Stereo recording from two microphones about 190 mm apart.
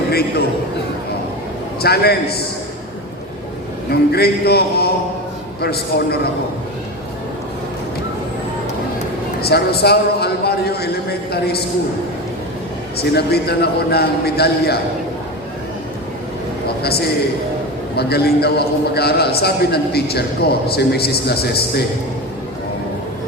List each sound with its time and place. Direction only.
0.1 s a man's voice: 55° left (ahead or behind)
1.8 s a man's voice: 55° left (ahead or behind)
4.1 s a man's voice: 55° left (ahead or behind)
9.4 s a man's voice: 55° left (ahead or behind)
13.0 s a man's voice: 55° left (ahead or behind)
16.8 s a man's voice: 55° left (ahead or behind)